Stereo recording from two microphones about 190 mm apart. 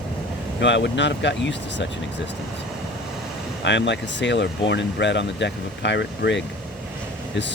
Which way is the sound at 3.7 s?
70° left (ahead or behind).